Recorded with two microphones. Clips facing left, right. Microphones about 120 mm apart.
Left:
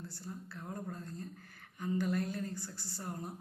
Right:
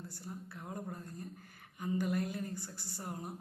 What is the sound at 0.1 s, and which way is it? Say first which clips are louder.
A man's voice: even; 15° right (ahead or behind).